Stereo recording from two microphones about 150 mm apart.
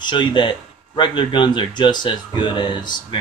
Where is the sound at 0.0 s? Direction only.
30° left (ahead or behind).